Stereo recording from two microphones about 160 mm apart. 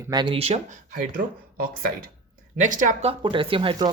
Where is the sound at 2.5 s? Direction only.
50° right (ahead or behind).